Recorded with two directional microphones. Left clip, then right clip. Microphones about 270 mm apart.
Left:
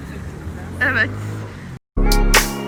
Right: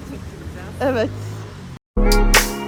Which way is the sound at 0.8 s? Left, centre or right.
Right.